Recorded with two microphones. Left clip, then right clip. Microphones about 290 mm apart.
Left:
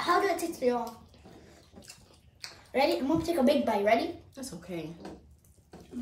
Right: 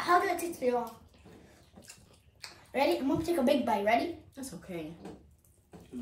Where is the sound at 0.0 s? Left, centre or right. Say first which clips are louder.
Even; centre.